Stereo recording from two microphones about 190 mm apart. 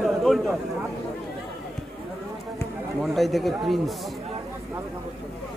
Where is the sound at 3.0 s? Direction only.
Centre (ahead or behind).